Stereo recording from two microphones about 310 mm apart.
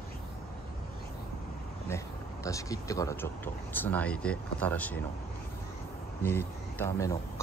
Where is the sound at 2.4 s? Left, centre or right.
Centre.